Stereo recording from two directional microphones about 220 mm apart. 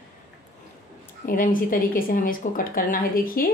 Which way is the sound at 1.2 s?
40° left (ahead or behind).